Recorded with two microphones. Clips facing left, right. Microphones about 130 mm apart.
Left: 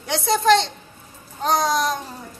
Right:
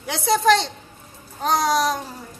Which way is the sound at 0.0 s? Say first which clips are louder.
Right 1 dB; centre (ahead or behind).